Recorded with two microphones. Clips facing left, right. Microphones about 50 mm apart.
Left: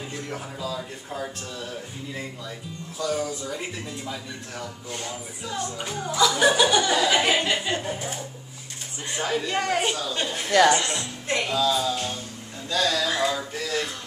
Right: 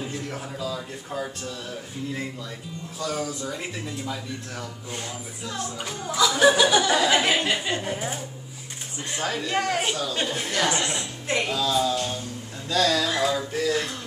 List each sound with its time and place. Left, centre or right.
0.3 s speech: centre
3.0 s speech: centre
9.1 s speech: centre
10.5 s a woman's voice: left
10.8 s a woman's voice: centre
11.5 s speech: centre
13.2 s a sound: centre